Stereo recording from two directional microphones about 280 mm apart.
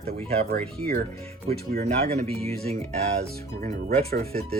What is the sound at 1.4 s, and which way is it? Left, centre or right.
Speech, right.